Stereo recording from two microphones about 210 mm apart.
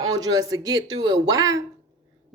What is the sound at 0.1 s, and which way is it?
A woman's voice, 15° right (ahead or behind).